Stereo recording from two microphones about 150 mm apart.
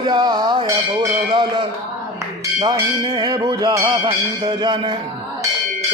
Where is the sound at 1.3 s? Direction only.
30° right (ahead or behind).